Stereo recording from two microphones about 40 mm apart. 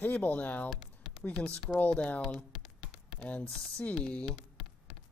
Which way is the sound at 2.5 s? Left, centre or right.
Centre.